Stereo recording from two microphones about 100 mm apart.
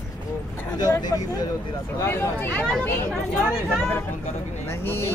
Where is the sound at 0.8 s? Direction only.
40° left (ahead or behind).